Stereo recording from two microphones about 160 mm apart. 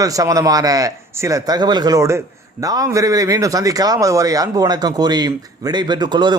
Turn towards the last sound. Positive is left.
turn(degrees=-25)  # may be behind; listen again after turning